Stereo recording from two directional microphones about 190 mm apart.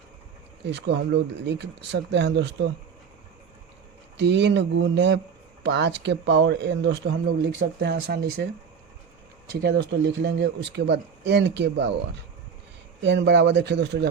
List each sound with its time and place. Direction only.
0.6 s speech: 65° right (ahead or behind)
4.2 s speech: 65° right (ahead or behind)
9.6 s speech: 60° right (ahead or behind)
13.0 s speech: 65° right (ahead or behind)